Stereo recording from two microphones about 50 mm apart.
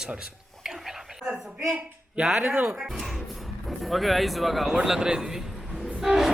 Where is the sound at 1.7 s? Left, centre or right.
Right.